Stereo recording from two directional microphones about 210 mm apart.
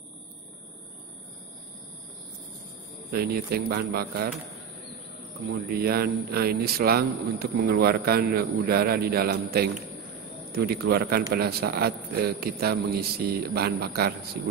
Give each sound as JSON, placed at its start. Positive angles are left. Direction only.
{"t": 3.1, "sound": "a man's voice", "side_deg": -50}
{"t": 5.5, "sound": "a man's voice", "side_deg": -45}
{"t": 10.7, "sound": "a man's voice", "side_deg": -50}